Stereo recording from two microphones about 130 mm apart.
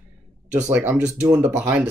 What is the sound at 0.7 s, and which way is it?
Speech, 10° right (ahead or behind).